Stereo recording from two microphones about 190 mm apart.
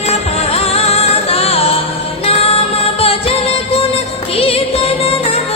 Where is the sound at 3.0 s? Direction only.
30° left (ahead or behind).